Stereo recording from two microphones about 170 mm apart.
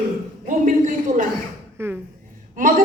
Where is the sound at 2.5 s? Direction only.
50° right (ahead or behind).